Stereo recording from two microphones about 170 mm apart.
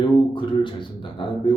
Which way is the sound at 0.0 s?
30° left (ahead or behind).